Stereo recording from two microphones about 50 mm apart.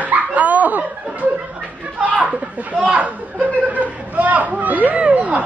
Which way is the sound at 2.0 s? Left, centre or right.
Right.